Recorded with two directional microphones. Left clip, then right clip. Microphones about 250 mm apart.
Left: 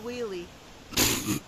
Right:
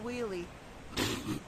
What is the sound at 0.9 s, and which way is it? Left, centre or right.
Cat, left.